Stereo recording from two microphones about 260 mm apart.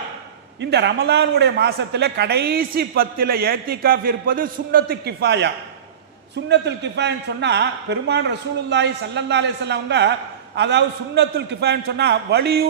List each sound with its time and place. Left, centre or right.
0.6 s a man's voice: right
6.5 s a man's voice: right